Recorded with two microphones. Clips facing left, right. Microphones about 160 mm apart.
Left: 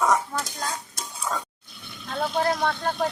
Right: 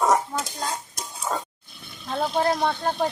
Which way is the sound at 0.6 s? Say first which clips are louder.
Right 1 dB; 20° right (ahead or behind).